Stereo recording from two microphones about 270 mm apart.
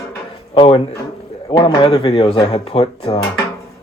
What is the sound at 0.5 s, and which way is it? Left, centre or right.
Speech, centre.